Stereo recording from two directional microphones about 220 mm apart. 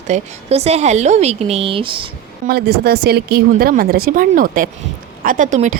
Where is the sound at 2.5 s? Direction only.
45° right (ahead or behind).